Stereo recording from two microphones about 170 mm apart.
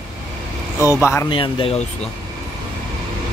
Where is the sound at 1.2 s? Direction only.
30° left (ahead or behind).